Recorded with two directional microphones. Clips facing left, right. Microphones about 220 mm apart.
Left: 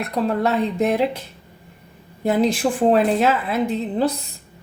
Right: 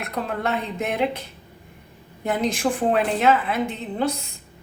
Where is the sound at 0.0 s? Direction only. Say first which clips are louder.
Left 6 dB; 35° left (ahead or behind).